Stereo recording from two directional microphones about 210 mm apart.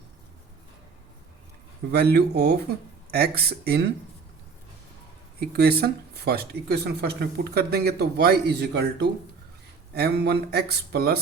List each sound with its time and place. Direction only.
1.9 s speech: 50° right (ahead or behind)
5.4 s speech: 50° right (ahead or behind)